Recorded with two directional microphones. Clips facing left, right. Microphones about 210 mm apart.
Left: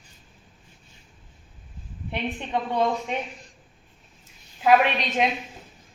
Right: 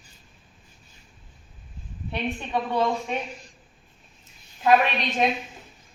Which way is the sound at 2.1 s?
15° left (ahead or behind).